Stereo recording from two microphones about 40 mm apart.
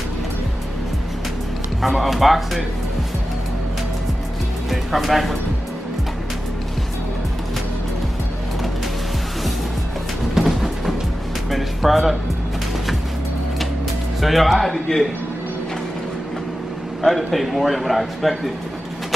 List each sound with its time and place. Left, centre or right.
1.8 s a man's voice: centre
4.6 s speech: centre
10.3 s a sound: centre
11.5 s music: centre
14.2 s a man's voice: centre
17.0 s a man's voice: centre